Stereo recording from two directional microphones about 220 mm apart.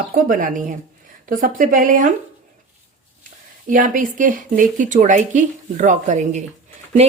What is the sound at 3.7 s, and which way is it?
Speech, 35° right (ahead or behind).